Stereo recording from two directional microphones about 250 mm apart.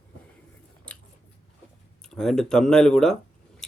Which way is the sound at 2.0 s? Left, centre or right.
Centre.